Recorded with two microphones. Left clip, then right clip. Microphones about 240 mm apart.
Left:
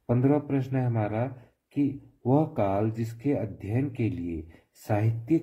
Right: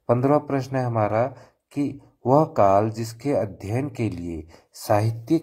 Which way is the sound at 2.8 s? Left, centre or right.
Centre.